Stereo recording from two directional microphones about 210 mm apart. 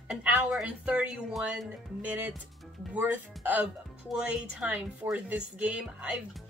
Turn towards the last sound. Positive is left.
turn(degrees=-5)  # may be behind; listen again after turning